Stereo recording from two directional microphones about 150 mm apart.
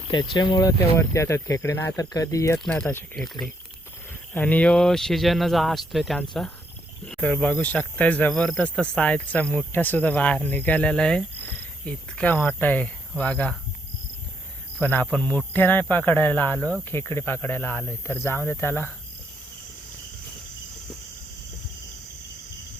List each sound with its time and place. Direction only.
0.1 s speech: 30° left (ahead or behind)
0.8 s speech: 20° left (ahead or behind)
2.6 s speech: 10° left (ahead or behind)
4.4 s speech: 10° left (ahead or behind)
14.8 s cricket: 15° left (ahead or behind)
15.1 s speech: 10° left (ahead or behind)